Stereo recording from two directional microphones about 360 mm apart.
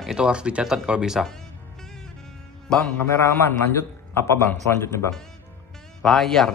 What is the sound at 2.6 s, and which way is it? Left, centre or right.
A man's voice, centre.